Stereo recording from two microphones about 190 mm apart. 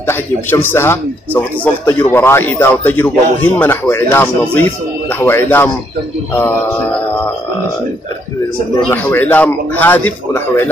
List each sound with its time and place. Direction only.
0.0 s a man's voice: 10° left (ahead or behind)
8.8 s a man's voice: 10° left (ahead or behind)